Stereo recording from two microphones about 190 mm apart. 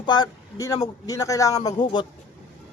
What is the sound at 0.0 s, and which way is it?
A man's voice, 20° left (ahead or behind).